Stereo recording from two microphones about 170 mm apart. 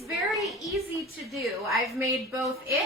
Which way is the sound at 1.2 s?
Centre (ahead or behind).